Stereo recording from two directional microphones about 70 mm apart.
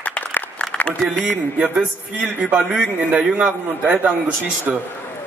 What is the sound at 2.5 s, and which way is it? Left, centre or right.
A man's voice, centre.